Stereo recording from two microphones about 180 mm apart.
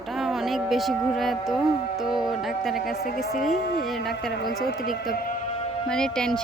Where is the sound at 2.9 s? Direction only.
60° left (ahead or behind).